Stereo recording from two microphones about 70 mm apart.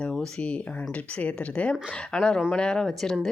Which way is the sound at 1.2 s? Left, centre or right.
Centre.